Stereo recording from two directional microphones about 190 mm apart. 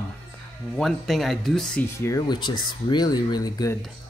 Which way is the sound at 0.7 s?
Centre (ahead or behind).